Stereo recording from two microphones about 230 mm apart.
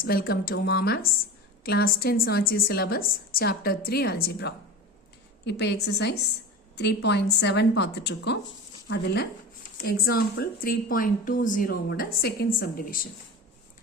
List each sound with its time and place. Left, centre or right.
0.0 s a woman's voice: left